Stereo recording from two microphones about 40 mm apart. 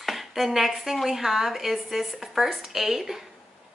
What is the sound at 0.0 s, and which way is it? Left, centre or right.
A woman's voice, centre.